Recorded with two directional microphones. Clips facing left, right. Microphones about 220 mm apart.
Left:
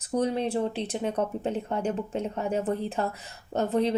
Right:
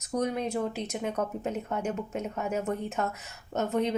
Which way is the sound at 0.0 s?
30° left (ahead or behind).